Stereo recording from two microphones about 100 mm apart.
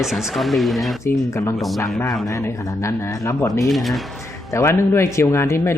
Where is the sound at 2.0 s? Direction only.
30° left (ahead or behind).